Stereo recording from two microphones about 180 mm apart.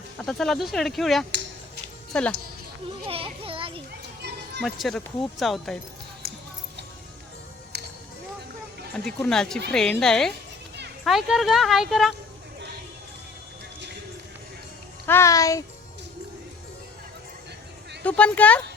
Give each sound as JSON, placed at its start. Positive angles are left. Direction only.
{"t": 0.2, "sound": "speech", "side_deg": 0}
{"t": 3.1, "sound": "children playing", "side_deg": -30}
{"t": 4.6, "sound": "speech", "side_deg": 0}
{"t": 9.0, "sound": "speech", "side_deg": 5}
{"t": 15.0, "sound": "speech", "side_deg": 15}
{"t": 18.0, "sound": "speech", "side_deg": 5}